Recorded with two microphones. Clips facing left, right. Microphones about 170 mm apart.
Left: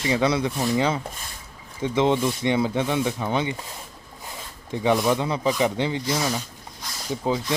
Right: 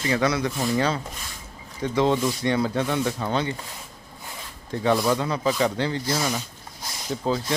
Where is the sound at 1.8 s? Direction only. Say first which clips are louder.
Left 1 dB; 20° left (ahead or behind).